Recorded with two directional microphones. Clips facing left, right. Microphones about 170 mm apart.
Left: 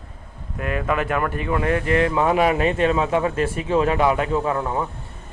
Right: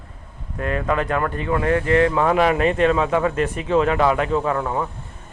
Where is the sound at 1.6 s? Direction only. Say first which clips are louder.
Right 3 dB; 20° left (ahead or behind).